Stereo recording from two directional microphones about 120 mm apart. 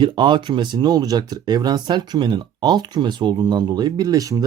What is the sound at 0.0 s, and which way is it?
Speech, 40° right (ahead or behind).